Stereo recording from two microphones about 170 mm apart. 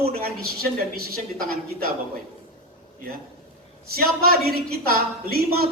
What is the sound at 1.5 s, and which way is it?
Speech, 60° right (ahead or behind).